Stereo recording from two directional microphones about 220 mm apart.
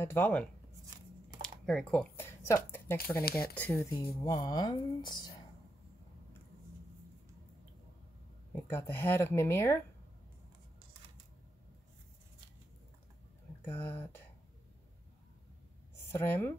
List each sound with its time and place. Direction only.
0.0 s speech: 10° left (ahead or behind)
1.4 s typing: 5° left (ahead or behind)
3.3 s speech: 45° left (ahead or behind)
3.5 s speech: 5° left (ahead or behind)
8.5 s speech: 10° left (ahead or behind)
13.7 s speech: 10° left (ahead or behind)
16.1 s speech: 10° left (ahead or behind)